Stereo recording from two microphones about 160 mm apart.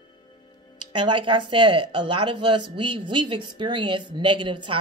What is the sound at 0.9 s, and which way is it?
Speech, 30° right (ahead or behind).